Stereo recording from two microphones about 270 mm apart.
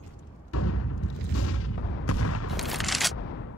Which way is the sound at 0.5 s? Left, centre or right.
Left.